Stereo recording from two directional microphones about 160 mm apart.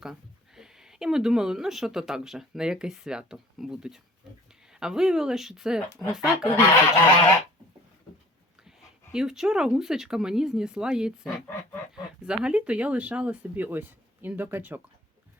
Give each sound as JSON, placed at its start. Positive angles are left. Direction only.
{"t": 0.0, "sound": "speech", "side_deg": -5}
{"t": 6.4, "sound": "speech", "side_deg": 15}
{"t": 9.1, "sound": "speech", "side_deg": -5}